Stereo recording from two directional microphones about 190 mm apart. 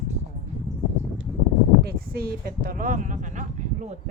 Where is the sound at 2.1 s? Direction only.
50° right (ahead or behind).